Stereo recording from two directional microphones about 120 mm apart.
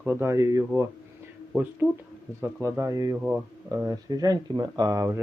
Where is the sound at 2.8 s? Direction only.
25° right (ahead or behind).